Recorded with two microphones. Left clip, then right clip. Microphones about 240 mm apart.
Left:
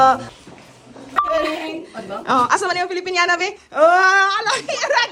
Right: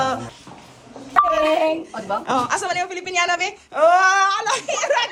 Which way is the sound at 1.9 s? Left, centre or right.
Left.